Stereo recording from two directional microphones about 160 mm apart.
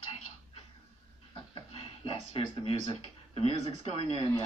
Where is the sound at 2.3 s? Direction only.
35° left (ahead or behind).